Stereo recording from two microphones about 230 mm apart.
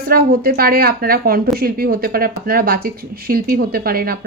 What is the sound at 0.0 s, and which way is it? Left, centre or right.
Speech, right.